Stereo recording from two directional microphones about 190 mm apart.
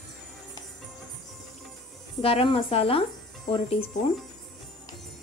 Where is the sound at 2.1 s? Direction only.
30° left (ahead or behind).